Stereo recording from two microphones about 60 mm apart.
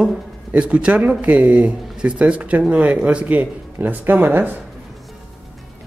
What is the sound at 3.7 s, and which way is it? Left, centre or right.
Speech, right.